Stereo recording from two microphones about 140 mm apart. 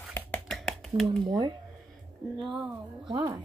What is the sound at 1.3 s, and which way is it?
Speech, 30° right (ahead or behind).